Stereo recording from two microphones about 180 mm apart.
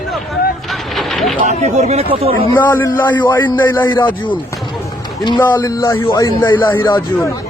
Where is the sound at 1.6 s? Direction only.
40° right (ahead or behind).